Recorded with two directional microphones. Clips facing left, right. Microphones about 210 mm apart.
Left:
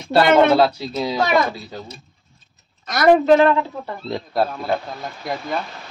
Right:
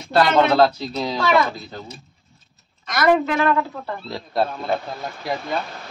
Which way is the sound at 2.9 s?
35° left (ahead or behind).